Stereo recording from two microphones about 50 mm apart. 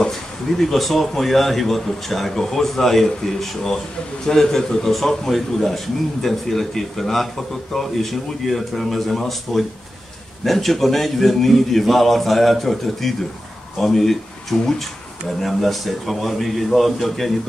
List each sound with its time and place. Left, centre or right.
0.0 s a man's voice: centre